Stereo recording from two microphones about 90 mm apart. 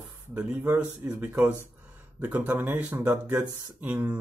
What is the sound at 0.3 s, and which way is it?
Speech, 20° right (ahead or behind).